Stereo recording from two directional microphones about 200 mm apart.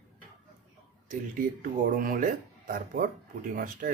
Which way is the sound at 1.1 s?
45° right (ahead or behind).